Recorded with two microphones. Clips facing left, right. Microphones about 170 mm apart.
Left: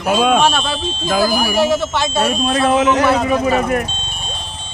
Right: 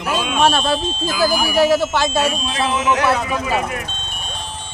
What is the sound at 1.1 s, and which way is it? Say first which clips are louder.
Speech: left 3 dB; 45° left (ahead or behind).